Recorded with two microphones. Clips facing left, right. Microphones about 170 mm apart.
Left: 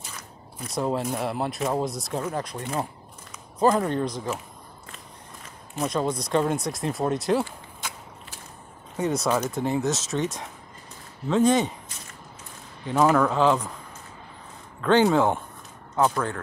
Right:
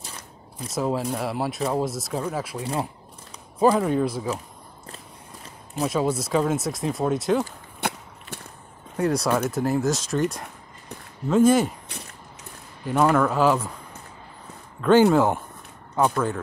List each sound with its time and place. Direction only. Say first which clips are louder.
0.7 s speech: right 1 dB; centre (ahead or behind)
5.9 s speech: right 2 dB; 5° right (ahead or behind)
7.8 s a sound: right 10 dB; 65° right (ahead or behind)
8.9 s speech: right 2 dB; centre (ahead or behind)
12.8 s speech: even; centre (ahead or behind)
14.8 s speech: right 3 dB; 5° right (ahead or behind)